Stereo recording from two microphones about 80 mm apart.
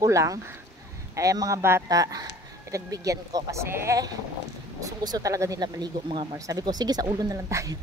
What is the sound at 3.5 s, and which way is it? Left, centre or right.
Speech, right.